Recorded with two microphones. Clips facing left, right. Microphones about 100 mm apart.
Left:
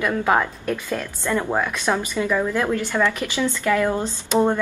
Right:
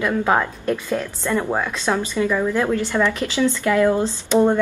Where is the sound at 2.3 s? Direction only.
Centre (ahead or behind).